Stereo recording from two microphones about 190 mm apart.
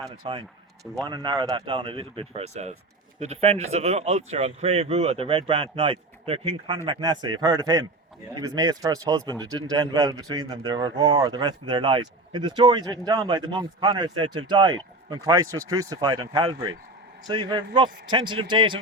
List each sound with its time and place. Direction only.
0.2 s speech: 30° right (ahead or behind)